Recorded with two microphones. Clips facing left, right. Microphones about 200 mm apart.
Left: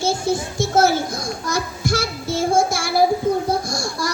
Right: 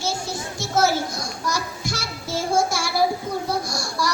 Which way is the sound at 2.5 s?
50° left (ahead or behind).